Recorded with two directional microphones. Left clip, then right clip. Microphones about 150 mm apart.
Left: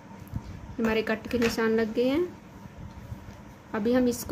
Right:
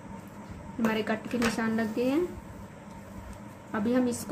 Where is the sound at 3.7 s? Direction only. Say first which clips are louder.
Left 3 dB; 80° left.